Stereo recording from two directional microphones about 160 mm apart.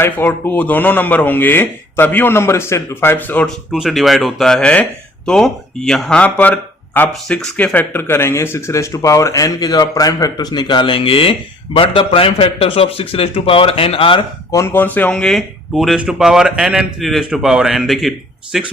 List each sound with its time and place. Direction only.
0.0 s speech: 10° left (ahead or behind)
3.7 s speech: centre (ahead or behind); by 14.3 s 35° left (ahead or behind)
14.5 s speech: 15° left (ahead or behind); by 18.7 s centre (ahead or behind)